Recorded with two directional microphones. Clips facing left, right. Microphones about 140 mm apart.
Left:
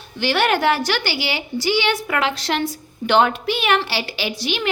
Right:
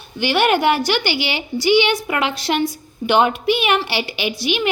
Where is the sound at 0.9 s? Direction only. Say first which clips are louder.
Right 3 dB; 15° right (ahead or behind).